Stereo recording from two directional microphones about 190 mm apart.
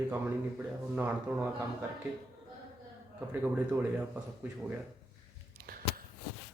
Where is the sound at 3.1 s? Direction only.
5° right (ahead or behind).